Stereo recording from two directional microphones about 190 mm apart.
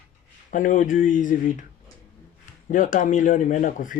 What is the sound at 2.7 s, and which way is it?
Speech, 45° left (ahead or behind).